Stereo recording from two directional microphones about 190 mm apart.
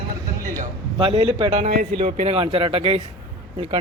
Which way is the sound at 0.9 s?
25° right (ahead or behind).